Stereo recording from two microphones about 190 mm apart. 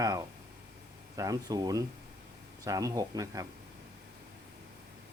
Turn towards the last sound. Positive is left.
turn(degrees=-20)  # may be behind; listen again after turning